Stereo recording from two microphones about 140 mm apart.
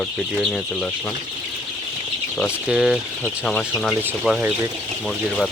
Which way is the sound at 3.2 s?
10° left (ahead or behind).